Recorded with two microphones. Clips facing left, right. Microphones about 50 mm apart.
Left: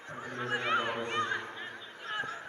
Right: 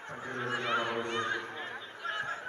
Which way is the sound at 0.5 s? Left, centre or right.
Centre.